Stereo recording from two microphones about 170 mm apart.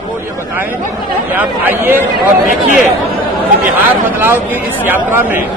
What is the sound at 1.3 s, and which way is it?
Speech, 10° right (ahead or behind).